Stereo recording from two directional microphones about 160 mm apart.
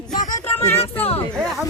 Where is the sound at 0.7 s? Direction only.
40° left (ahead or behind).